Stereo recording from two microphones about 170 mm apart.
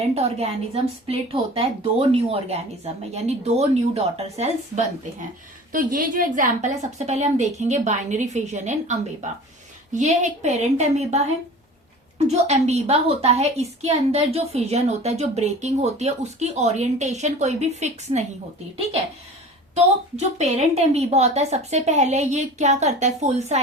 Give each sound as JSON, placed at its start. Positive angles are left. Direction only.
{"t": 0.1, "sound": "a woman's voice", "side_deg": -35}
{"t": 5.7, "sound": "a woman's voice", "side_deg": -55}
{"t": 12.3, "sound": "a woman's voice", "side_deg": -40}
{"t": 19.7, "sound": "a woman's voice", "side_deg": -40}